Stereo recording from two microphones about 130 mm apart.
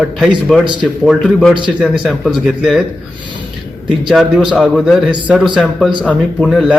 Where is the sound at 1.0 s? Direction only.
Centre (ahead or behind).